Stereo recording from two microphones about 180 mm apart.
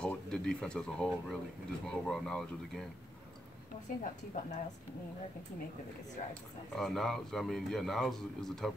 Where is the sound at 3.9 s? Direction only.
50° left (ahead or behind).